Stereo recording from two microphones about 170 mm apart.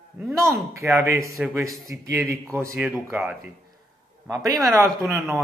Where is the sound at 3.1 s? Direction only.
Centre (ahead or behind).